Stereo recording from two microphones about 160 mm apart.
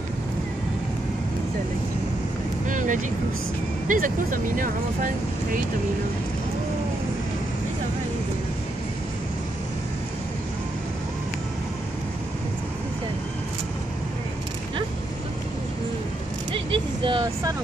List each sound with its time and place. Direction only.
2.6 s vehicle: 50° right (ahead or behind)
3.8 s speech: 55° right (ahead or behind)
16.5 s vehicle: 35° right (ahead or behind)